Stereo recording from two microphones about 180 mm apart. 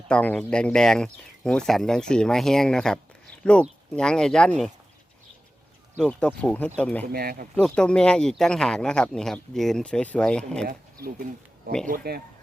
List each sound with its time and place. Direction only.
0.1 s speech: 5° left (ahead or behind)
6.0 s speech: 5° left (ahead or behind)
7.1 s speech: 55° right (ahead or behind)
7.5 s speech: 5° left (ahead or behind)
10.7 s speech: 55° right (ahead or behind)